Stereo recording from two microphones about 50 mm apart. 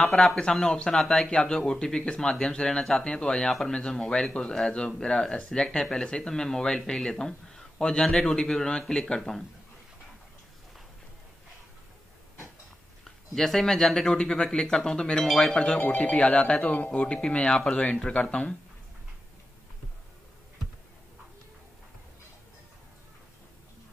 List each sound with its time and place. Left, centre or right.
0.0 s speech: centre
13.3 s speech: centre; by 18.5 s left